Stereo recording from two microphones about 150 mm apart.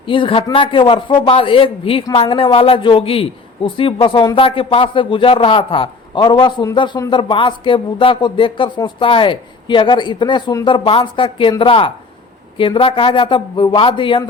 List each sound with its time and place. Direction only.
0.0 s speech: 35° left (ahead or behind)